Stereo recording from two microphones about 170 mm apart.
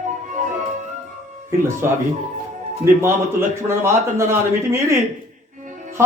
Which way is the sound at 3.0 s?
15° right (ahead or behind).